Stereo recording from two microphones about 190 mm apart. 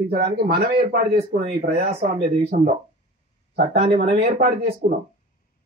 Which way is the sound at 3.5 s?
60° right (ahead or behind).